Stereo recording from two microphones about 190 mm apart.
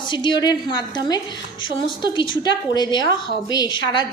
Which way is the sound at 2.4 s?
20° left (ahead or behind).